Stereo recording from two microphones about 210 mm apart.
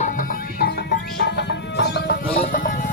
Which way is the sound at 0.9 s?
55° left (ahead or behind).